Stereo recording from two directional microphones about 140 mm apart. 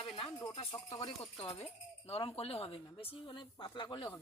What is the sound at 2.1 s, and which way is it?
Speech, 45° left (ahead or behind).